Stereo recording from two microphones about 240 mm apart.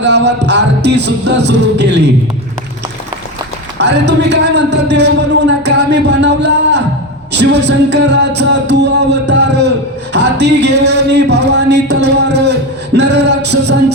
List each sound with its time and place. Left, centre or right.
0.0 s a man's voice: right
3.8 s a man's voice: right
5.6 s music: right
7.3 s a man's voice: right